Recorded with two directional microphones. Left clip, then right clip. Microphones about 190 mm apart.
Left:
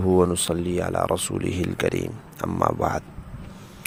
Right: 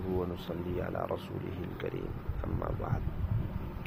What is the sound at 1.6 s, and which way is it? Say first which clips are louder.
Speech: left 14 dB; 65° left (ahead or behind).